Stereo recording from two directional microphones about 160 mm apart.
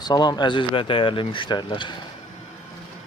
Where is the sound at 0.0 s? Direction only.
25° left (ahead or behind).